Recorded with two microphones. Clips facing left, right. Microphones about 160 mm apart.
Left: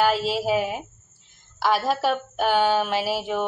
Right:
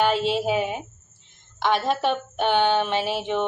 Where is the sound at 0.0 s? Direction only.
5° left (ahead or behind).